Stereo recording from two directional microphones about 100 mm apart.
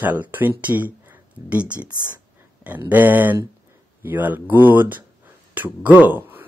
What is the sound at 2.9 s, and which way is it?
Speech, 20° right (ahead or behind).